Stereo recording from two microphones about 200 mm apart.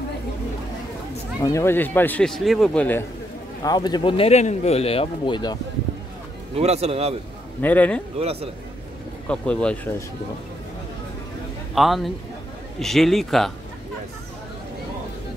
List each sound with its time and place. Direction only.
1.4 s speech: 15° left (ahead or behind)
3.6 s speech: 20° left (ahead or behind)
6.5 s a man's voice: 30° right (ahead or behind)
7.6 s speech: 5° left (ahead or behind)
8.2 s speech: 30° right (ahead or behind)
9.3 s a man's voice: 5° left (ahead or behind)
11.7 s a man's voice: centre (ahead or behind)